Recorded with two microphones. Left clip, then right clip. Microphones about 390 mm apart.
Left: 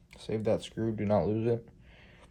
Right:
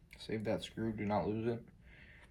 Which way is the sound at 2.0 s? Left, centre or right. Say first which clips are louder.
Left 1 dB; centre.